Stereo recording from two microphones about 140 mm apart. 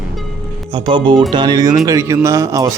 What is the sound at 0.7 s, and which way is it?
Speech, 35° right (ahead or behind).